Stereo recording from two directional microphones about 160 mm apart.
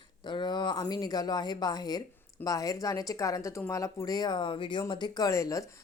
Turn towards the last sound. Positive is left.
turn(degrees=20)  # may be behind; listen again after turning